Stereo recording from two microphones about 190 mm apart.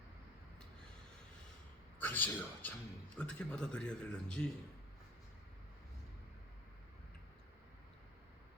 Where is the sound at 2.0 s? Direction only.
10° left (ahead or behind).